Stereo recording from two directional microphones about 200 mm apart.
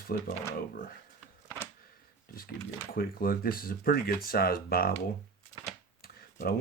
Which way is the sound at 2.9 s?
45° left (ahead or behind).